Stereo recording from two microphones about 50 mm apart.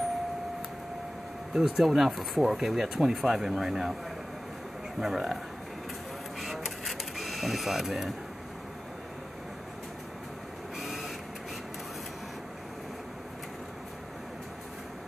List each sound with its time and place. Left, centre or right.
1.5 s speech: centre
5.0 s speech: centre
6.4 s printer: centre
10.8 s printer: centre